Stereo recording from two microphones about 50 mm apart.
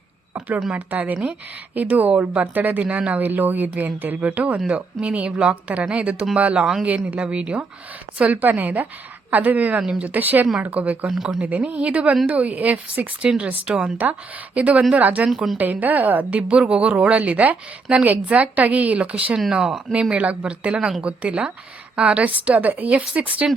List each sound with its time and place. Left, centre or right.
0.3 s a sound: right
0.7 s a woman's voice: right
8.2 s a woman's voice: right
11.1 s speech: centre
11.3 s a woman's voice: right
13.7 s a woman's voice: centre
19.5 s a woman's voice: centre; by 23.5 s right